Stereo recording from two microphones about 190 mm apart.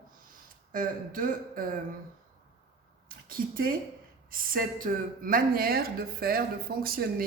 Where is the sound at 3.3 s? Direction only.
50° right (ahead or behind).